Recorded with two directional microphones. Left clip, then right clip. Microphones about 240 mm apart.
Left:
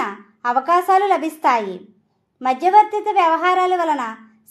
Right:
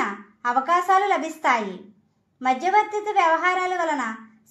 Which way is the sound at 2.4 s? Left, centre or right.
Left.